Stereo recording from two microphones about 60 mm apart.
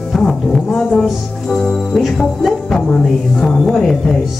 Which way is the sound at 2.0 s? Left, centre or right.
Centre.